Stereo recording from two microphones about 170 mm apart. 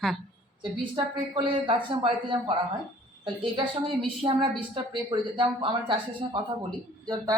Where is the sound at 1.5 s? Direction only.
30° right (ahead or behind).